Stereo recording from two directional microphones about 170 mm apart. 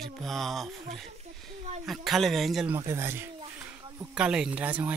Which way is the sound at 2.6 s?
15° right (ahead or behind).